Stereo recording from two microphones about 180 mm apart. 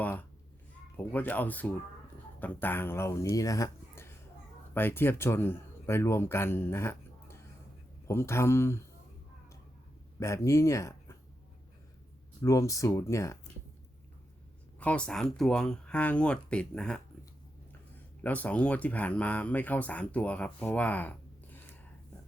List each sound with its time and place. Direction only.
0.0 s a sound: 10° left (ahead or behind)
1.1 s speech: 10° left (ahead or behind)
10.2 s speech: 15° left (ahead or behind)
12.4 s speech: 15° left (ahead or behind)
14.8 s speech: 5° left (ahead or behind)
18.2 s speech: 10° left (ahead or behind)